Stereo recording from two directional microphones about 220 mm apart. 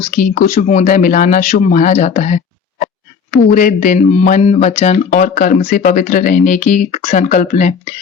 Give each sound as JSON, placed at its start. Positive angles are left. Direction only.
{"t": 0.1, "sound": "speech", "side_deg": 40}
{"t": 3.5, "sound": "speech", "side_deg": 35}